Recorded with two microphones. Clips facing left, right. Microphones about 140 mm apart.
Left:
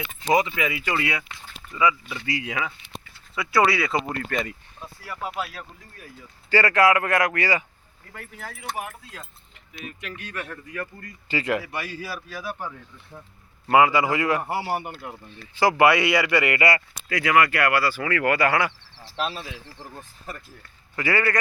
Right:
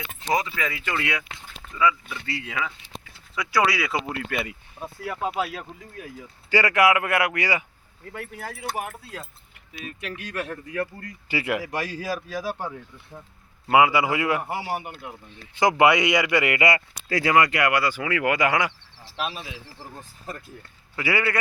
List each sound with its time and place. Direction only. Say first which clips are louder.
0.3 s speech: left 4 dB; 15° left (ahead or behind); by 4.5 s 10° right (ahead or behind)
6.5 s speech: left 1 dB; 15° right (ahead or behind)
8.4 s speech: right 1 dB; 40° right (ahead or behind)
10.4 s speech: right 7 dB; 35° right (ahead or behind)
11.3 s speech: left 1 dB; 15° right (ahead or behind)
11.6 s speech: right 4 dB; 40° right (ahead or behind)
13.7 s speech: even; 15° right (ahead or behind)
20.9 s speech: left 1 dB; 10° right (ahead or behind)